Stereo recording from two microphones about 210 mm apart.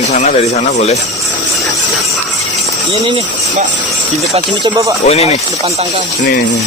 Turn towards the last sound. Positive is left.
turn(degrees=30)  # may be behind; listen again after turning